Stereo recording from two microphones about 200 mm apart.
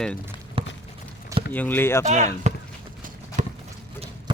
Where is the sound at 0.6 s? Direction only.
25° right (ahead or behind).